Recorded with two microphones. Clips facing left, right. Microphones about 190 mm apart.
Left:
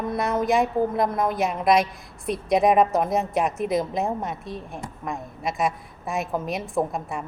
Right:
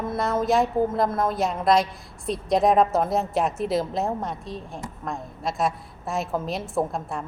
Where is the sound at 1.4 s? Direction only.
Centre (ahead or behind).